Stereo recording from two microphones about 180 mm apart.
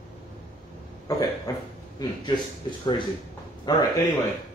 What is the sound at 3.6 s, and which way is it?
Speech, 20° left (ahead or behind).